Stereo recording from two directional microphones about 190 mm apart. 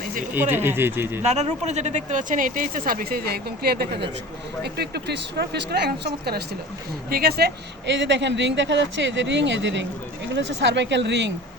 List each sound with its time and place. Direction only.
0.5 s speech: 10° right (ahead or behind)
1.2 s speech: 35° right (ahead or behind); by 11.3 s 65° right (ahead or behind)